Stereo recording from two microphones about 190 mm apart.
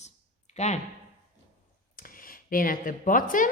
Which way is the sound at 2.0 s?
45° left (ahead or behind).